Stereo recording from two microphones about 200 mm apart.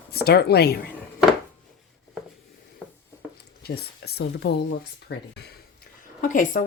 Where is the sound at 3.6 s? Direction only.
55° left (ahead or behind).